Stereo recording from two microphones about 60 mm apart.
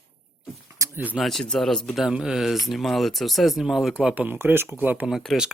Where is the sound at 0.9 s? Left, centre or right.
Right.